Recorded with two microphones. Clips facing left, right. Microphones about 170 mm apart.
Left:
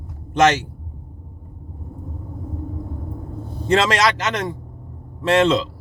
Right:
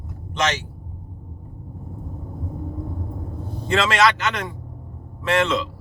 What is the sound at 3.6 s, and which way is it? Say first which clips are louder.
A man's voice: left 2 dB; 40° left (ahead or behind).